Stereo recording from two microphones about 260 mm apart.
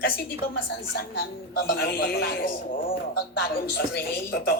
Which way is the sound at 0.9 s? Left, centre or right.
Left.